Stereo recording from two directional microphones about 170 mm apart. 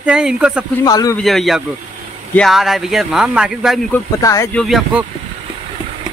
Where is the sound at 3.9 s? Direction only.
15° left (ahead or behind).